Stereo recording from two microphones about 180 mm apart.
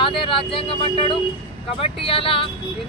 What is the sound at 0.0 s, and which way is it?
Speech, 30° left (ahead or behind).